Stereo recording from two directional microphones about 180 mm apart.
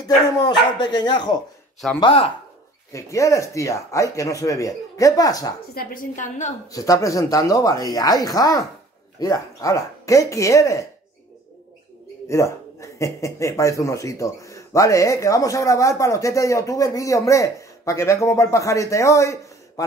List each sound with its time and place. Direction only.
0.0 s speech: 20° left (ahead or behind)
2.9 s speech: 15° left (ahead or behind)
5.8 s a woman's voice: 45° left (ahead or behind)
6.7 s speech: 20° left (ahead or behind)
12.3 s speech: 15° left (ahead or behind)